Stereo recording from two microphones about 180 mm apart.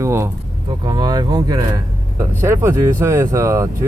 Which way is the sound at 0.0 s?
15° right (ahead or behind).